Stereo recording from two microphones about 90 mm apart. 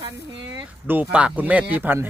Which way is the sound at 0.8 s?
15° right (ahead or behind).